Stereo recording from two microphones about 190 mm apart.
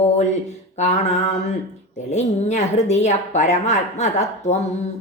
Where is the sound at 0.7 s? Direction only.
35° left (ahead or behind).